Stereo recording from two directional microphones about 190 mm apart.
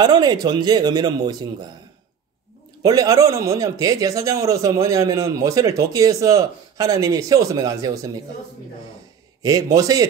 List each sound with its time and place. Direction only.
0.0 s a man's voice: 20° right (ahead or behind)
2.8 s a man's voice: 20° right (ahead or behind)
9.4 s a man's voice: 20° right (ahead or behind)